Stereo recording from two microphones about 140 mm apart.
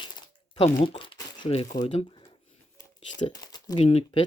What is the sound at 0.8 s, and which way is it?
Speech, 35° left (ahead or behind).